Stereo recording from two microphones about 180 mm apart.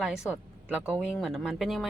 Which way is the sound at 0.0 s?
5° right (ahead or behind).